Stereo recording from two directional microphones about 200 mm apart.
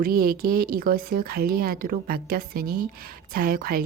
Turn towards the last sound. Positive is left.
turn(degrees=-45)  # may be behind; listen again after turning